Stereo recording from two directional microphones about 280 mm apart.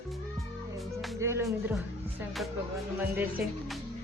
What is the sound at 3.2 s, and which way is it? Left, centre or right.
Music, centre.